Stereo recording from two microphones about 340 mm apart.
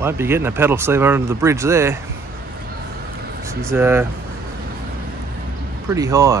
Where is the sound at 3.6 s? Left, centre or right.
Centre.